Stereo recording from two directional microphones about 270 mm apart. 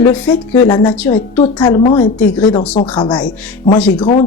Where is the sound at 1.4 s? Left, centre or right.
Centre.